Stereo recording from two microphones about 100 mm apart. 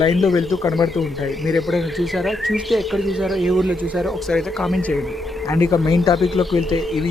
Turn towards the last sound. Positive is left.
turn(degrees=0)  # may be behind; listen again after turning